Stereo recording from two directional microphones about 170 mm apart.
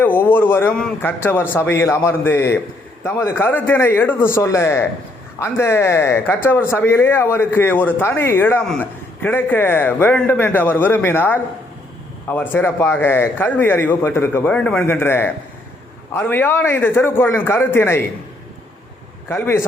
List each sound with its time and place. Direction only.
0.0 s speech: 10° left (ahead or behind)
19.3 s speech: 15° left (ahead or behind)